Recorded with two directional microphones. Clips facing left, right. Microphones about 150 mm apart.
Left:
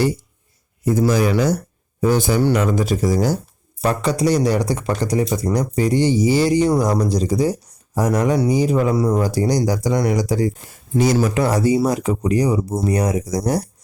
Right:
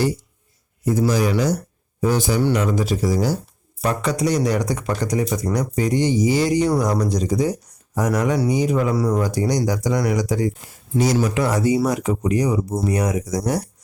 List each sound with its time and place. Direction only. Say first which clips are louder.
0.9 s speech: left 2 dB; 55° left (ahead or behind)
3.8 s speech: left 2 dB; 30° left (ahead or behind)
10.9 s speech: left 2 dB; 55° left (ahead or behind)
11.3 s speech: left 2 dB; 35° left (ahead or behind)